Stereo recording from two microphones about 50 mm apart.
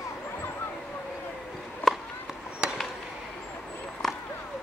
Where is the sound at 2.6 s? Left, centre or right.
Centre.